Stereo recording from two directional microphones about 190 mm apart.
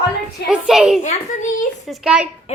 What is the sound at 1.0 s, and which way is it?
Speech, 40° left (ahead or behind).